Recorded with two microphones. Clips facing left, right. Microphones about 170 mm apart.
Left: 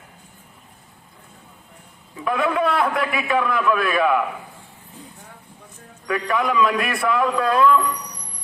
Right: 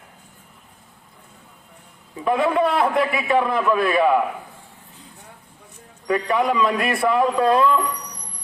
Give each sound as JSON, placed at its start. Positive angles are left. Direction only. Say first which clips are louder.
{"t": 2.1, "sound": "a man's voice", "louder": "right 2 dB", "side_deg": -30}
{"t": 6.1, "sound": "a man's voice", "louder": "right 2 dB", "side_deg": -30}